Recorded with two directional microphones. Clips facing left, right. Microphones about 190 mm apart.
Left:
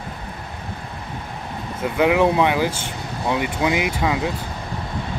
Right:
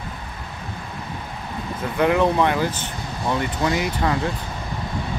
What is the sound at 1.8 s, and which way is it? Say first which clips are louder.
Speech: left 2 dB; 10° left (ahead or behind).